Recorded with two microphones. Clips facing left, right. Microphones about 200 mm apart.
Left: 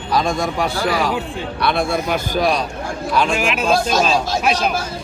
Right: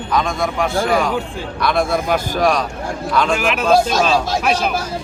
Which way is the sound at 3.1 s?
10° left (ahead or behind).